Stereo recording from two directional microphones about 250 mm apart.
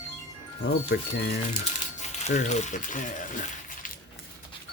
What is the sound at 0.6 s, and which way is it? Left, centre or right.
Speech, left.